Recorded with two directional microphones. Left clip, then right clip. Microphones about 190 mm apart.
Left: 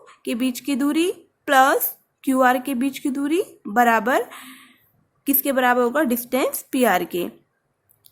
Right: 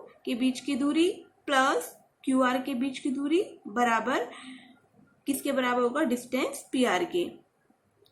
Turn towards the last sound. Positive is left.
turn(degrees=60)  # may be behind; listen again after turning